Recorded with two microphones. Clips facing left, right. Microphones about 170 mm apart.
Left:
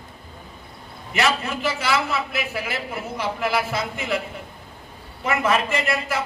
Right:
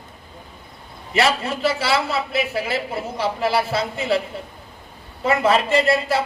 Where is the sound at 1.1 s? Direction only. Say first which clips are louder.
Right 3 dB; 30° right (ahead or behind).